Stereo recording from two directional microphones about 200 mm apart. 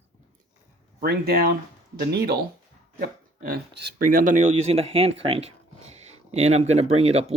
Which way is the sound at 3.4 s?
45° right (ahead or behind).